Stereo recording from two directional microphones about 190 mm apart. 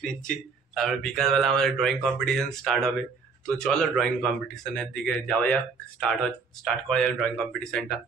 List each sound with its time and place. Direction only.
0.7 s speech: centre (ahead or behind)